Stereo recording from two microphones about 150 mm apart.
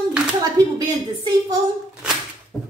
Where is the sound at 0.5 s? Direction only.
25° right (ahead or behind).